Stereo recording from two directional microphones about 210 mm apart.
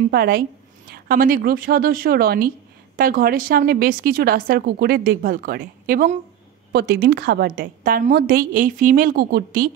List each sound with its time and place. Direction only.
0.1 s a woman's voice: 45° right (ahead or behind)